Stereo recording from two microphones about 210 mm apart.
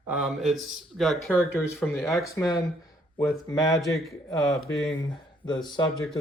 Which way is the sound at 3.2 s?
15° left (ahead or behind).